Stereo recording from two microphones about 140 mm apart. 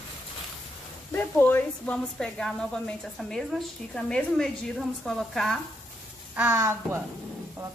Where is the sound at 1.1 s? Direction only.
15° left (ahead or behind).